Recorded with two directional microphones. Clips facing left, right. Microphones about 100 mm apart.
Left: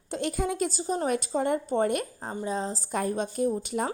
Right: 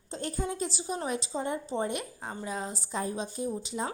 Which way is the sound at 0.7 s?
40° left (ahead or behind).